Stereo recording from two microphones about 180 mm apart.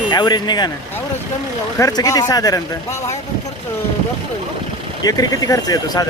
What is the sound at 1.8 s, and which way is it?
Speech, 20° left (ahead or behind).